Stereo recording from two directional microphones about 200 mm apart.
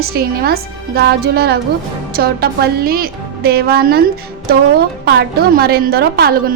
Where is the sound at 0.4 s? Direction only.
50° right (ahead or behind).